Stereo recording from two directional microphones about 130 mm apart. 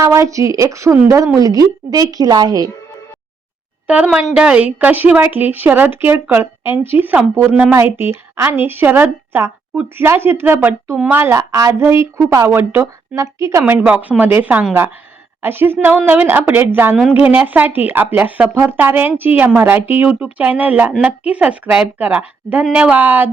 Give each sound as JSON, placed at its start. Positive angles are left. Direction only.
{"t": 0.0, "sound": "a woman's voice", "side_deg": -25}
{"t": 3.8, "sound": "a woman's voice", "side_deg": -10}
{"t": 16.9, "sound": "a woman's voice", "side_deg": 0}
{"t": 17.3, "sound": "a woman's voice", "side_deg": -15}